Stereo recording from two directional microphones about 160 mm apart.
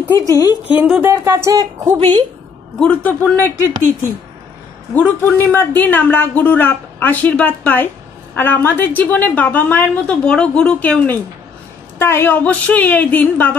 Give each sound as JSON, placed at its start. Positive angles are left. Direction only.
{"t": 0.3, "sound": "a woman's voice", "side_deg": 20}
{"t": 0.7, "sound": "speech", "side_deg": -5}
{"t": 2.8, "sound": "speech", "side_deg": 10}
{"t": 4.9, "sound": "speech", "side_deg": 10}